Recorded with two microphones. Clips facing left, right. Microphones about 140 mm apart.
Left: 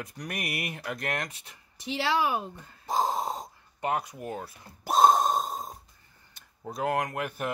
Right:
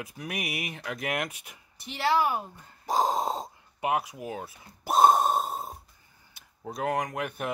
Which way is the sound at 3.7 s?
5° right (ahead or behind).